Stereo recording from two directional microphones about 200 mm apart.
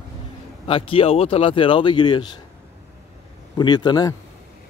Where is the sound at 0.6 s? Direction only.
25° left (ahead or behind).